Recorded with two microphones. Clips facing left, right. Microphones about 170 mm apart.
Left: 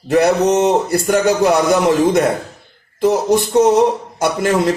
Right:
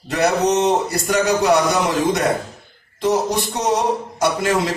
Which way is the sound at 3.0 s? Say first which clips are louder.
Left 5 dB; 55° left (ahead or behind).